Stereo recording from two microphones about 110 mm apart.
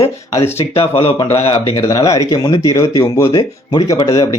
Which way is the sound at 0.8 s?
60° left (ahead or behind).